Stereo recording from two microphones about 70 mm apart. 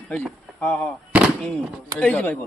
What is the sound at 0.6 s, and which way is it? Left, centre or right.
Speech, left.